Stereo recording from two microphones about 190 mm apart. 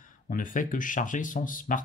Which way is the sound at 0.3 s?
45° left (ahead or behind).